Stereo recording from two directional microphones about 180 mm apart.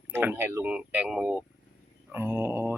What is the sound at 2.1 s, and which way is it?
Speech, 10° right (ahead or behind).